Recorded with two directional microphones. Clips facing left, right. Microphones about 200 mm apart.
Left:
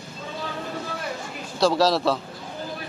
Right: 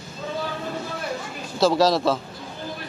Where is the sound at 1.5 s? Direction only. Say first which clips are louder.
Right 1 dB; centre (ahead or behind).